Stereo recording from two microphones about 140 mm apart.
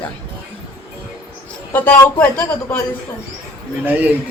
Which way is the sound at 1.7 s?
15° left (ahead or behind).